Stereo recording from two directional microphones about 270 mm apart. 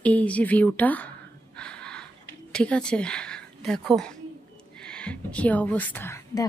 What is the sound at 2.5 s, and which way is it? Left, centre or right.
A woman's voice, centre.